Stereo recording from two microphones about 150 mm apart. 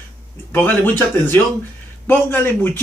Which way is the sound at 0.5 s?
10° left (ahead or behind).